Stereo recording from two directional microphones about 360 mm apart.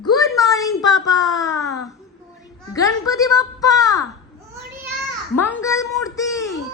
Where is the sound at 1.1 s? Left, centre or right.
Centre.